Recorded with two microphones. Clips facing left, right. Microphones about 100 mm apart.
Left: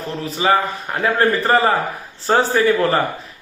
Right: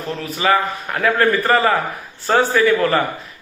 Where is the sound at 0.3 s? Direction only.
30° left (ahead or behind).